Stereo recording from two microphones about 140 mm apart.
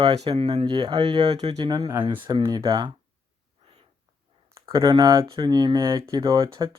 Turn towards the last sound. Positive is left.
turn(degrees=-30)  # may be behind; listen again after turning